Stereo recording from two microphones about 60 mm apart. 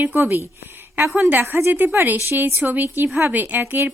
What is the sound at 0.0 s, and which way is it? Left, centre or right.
Speech, right.